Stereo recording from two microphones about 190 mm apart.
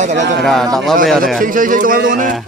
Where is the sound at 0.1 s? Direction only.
70° right (ahead or behind).